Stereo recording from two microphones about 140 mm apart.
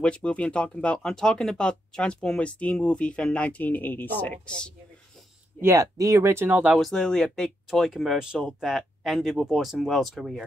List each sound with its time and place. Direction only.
0.0 s speech: 10° left (ahead or behind)
5.6 s speech: 20° right (ahead or behind)
6.9 s speech: 5° left (ahead or behind)